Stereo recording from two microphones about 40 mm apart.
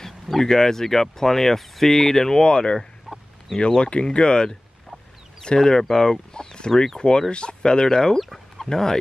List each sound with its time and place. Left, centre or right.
0.0 s speech: centre
8.2 s chicken: centre
8.6 s speech: centre